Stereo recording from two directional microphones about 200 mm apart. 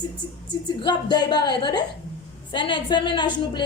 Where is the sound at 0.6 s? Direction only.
20° left (ahead or behind).